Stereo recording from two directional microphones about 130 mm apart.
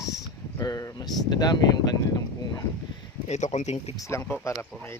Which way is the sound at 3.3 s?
65° left (ahead or behind).